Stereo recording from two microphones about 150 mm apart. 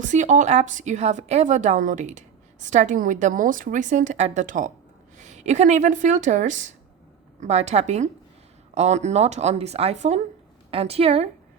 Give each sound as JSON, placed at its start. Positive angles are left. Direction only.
{"t": 0.0, "sound": "a woman's voice", "side_deg": -55}